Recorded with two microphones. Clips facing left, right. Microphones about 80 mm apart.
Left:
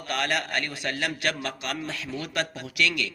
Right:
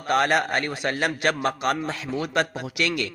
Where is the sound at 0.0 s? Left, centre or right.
Right.